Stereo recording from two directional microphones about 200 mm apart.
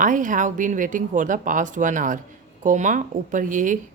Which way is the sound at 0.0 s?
40° right (ahead or behind).